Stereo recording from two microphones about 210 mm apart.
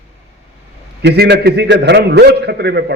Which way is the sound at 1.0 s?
50° right (ahead or behind).